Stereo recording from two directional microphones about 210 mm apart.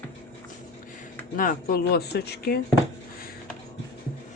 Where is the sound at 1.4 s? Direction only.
45° left (ahead or behind).